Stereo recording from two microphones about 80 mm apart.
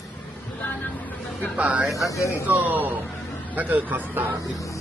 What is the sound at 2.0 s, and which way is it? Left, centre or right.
Speech, left.